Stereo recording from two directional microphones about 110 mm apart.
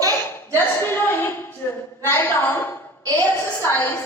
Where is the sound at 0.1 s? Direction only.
20° left (ahead or behind).